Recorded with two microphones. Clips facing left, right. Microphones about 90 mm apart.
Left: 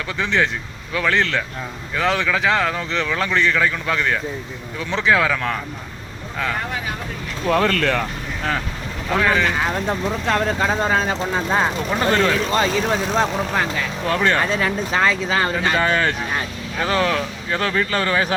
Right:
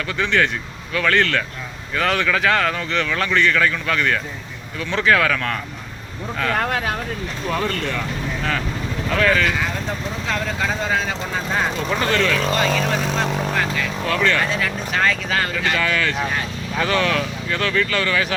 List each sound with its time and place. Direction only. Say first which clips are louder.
0.3 s speech: even; 25° left (ahead or behind)
6.6 s speech: right 5 dB; 70° right (ahead or behind)
7.6 s speech: left 5 dB; 65° left (ahead or behind)
9.1 s speech: even; 15° left (ahead or behind)
10.2 s speech: left 5 dB; 50° left (ahead or behind)
10.6 s speech: left 3 dB; 40° left (ahead or behind)
11.5 s speech: even; 25° left (ahead or behind)
13.7 s speech: even; 30° left (ahead or behind)